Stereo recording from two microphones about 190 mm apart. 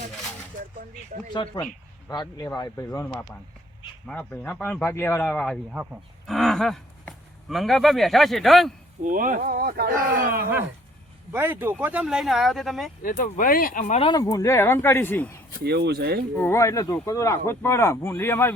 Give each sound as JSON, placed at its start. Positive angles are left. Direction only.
{"t": 1.3, "sound": "speech", "side_deg": 25}
{"t": 4.0, "sound": "speech", "side_deg": 5}
{"t": 5.7, "sound": "speech", "side_deg": -5}
{"t": 9.0, "sound": "speech", "side_deg": -45}
{"t": 11.3, "sound": "speech", "side_deg": -10}
{"t": 13.0, "sound": "speech", "side_deg": 45}
{"t": 14.0, "sound": "speech", "side_deg": 20}
{"t": 15.6, "sound": "speech", "side_deg": -60}
{"t": 16.4, "sound": "speech", "side_deg": 15}